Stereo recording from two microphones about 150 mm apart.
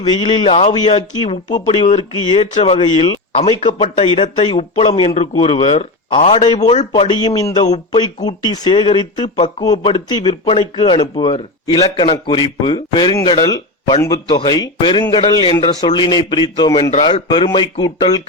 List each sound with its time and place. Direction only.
0.0 s speech: 35° left (ahead or behind)
1.6 s speech: 35° left (ahead or behind)
7.2 s a man's voice: 25° left (ahead or behind)